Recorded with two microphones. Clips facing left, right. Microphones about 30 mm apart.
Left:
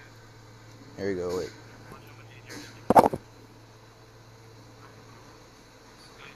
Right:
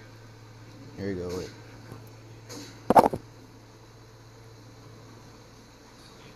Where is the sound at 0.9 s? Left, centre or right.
Left.